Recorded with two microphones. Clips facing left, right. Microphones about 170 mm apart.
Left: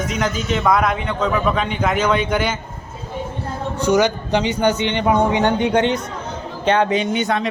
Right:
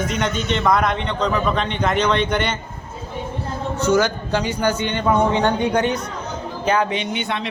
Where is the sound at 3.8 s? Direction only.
15° left (ahead or behind).